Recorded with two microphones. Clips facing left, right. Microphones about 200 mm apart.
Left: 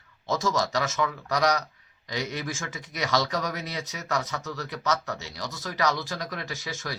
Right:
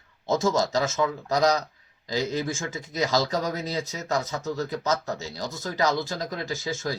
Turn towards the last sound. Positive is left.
turn(degrees=-25)  # may be behind; listen again after turning